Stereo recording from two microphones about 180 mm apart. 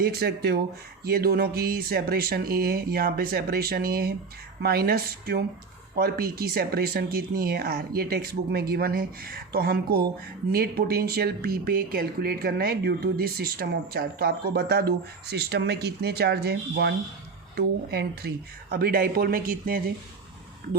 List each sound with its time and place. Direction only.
0.0 s speech: 60° right (ahead or behind)